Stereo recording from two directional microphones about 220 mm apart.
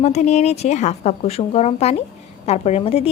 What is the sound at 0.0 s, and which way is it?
A woman's voice, 30° left (ahead or behind).